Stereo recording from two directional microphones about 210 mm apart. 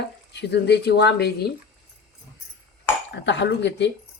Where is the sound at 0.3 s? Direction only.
55° left (ahead or behind).